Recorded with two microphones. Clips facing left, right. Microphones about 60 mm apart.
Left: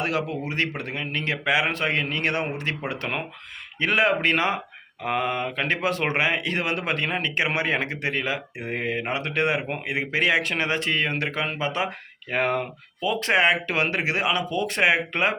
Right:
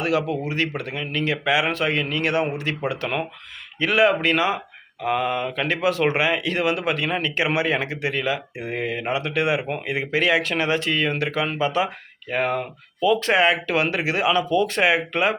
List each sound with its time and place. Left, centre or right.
0.0 s speech: left
12.3 s speech: left
13.0 s speech: left